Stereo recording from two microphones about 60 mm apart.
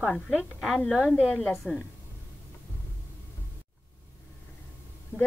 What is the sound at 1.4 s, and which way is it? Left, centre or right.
Speech, centre.